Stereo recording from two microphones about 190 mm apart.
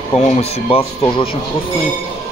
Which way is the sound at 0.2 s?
35° left (ahead or behind).